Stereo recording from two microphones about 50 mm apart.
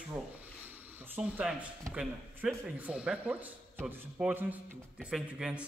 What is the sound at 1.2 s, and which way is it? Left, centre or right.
Speech, right.